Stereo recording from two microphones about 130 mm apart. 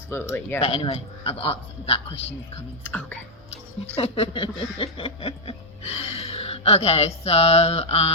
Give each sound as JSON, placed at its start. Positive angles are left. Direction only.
{"t": 0.1, "sound": "speech", "side_deg": 20}
{"t": 0.6, "sound": "speech", "side_deg": 45}
{"t": 2.8, "sound": "speech", "side_deg": 10}
{"t": 3.5, "sound": "speech", "side_deg": 50}